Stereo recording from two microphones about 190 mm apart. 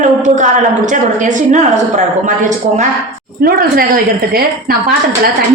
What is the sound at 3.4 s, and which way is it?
A woman's voice, 50° right (ahead or behind).